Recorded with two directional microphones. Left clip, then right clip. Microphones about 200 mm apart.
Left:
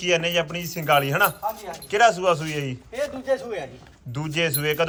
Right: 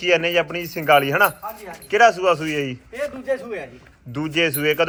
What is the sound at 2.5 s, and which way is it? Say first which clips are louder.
Speech: right 5 dB; 55° left (ahead or behind).